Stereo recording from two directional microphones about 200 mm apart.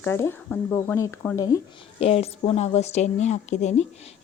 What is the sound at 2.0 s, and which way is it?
A woman's voice, 30° left (ahead or behind).